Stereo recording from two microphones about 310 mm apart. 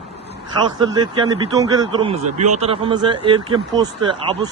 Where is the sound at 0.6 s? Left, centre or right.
Centre.